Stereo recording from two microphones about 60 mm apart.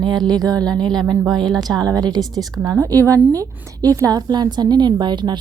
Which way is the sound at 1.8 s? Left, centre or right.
Right.